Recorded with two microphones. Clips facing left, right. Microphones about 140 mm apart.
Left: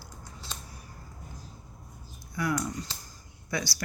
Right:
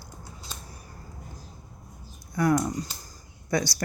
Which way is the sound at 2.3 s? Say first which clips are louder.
Right 7 dB; 45° right (ahead or behind).